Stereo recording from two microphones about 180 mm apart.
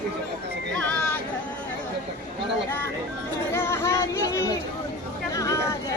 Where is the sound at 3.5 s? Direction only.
15° left (ahead or behind).